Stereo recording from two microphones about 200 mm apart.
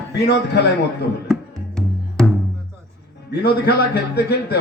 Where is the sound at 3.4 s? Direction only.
55° left (ahead or behind).